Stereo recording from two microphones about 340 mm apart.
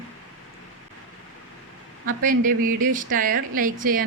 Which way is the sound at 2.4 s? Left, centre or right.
Right.